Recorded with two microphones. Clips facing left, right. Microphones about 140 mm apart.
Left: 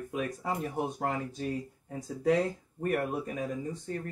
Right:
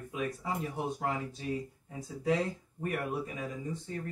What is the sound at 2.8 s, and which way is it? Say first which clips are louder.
Speech: left 4 dB; 50° left (ahead or behind).